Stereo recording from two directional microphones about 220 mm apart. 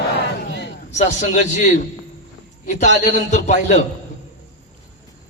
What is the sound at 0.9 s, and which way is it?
Speech, 35° left (ahead or behind).